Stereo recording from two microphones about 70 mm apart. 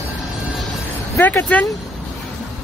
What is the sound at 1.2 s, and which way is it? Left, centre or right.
Speech, left.